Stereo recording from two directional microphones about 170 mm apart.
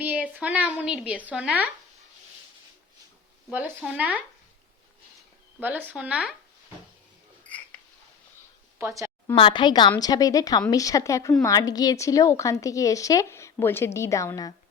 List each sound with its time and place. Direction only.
0.0 s a sound: 10° right (ahead or behind)
0.4 s a woman's voice: 10° right (ahead or behind)
3.9 s a woman's voice: 10° right (ahead or behind)
5.5 s a woman's voice: 10° right (ahead or behind)
9.3 s a woman's voice: 30° left (ahead or behind)